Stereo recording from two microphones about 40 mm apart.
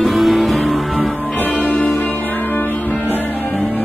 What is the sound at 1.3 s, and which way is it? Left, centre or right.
Music, left.